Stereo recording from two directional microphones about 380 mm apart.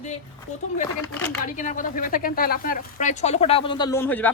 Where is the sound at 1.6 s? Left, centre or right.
Centre.